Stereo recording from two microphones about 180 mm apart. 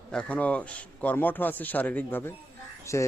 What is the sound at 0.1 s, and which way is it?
Speech, 5° left (ahead or behind).